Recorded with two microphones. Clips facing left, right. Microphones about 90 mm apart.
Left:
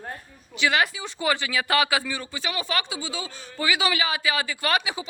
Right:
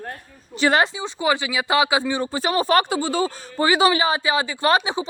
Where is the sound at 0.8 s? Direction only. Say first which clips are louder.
Right 4 dB; 25° right (ahead or behind).